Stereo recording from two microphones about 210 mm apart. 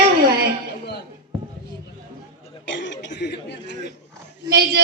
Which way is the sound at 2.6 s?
60° left (ahead or behind).